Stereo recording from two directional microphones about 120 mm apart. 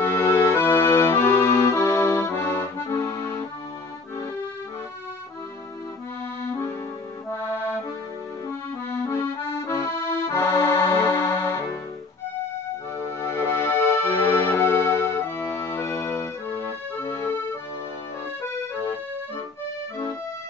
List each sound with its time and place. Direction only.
0.0 s accordion: 20° left (ahead or behind)
7.3 s accordion: 20° left (ahead or behind)
9.0 s accordion: 20° left (ahead or behind)
13.0 s music: 20° left (ahead or behind)